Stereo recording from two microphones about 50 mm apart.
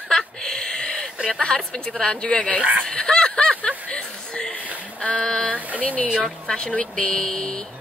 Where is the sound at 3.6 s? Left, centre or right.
Left.